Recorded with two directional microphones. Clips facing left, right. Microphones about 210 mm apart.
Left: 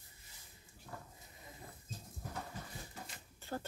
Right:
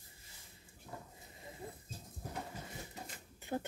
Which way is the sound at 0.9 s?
20° right (ahead or behind).